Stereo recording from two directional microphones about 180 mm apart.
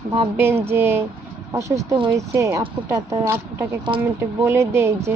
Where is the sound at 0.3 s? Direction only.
15° right (ahead or behind).